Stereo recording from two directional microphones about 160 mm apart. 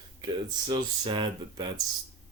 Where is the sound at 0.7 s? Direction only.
30° right (ahead or behind).